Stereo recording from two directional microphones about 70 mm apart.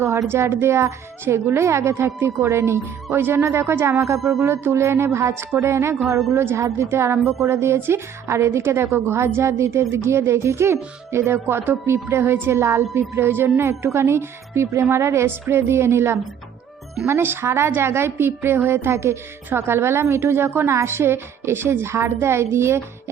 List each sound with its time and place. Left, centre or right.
0.0 s a woman's voice: right